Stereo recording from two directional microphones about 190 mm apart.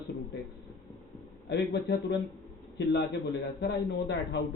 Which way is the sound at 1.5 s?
60° left (ahead or behind).